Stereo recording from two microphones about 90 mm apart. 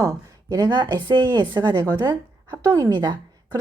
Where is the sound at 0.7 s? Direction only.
60° right (ahead or behind).